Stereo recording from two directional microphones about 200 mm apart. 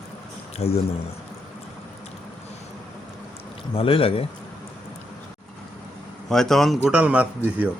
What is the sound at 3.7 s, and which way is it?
Speech, 30° left (ahead or behind).